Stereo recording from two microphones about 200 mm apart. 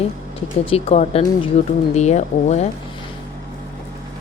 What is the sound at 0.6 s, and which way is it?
Speech, 30° left (ahead or behind).